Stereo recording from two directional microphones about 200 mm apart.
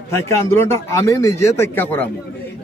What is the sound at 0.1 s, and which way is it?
A man's voice, 10° left (ahead or behind).